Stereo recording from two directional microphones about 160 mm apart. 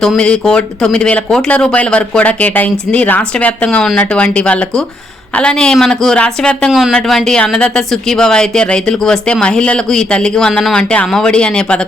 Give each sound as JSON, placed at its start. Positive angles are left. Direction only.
{"t": 0.0, "sound": "speech", "side_deg": 5}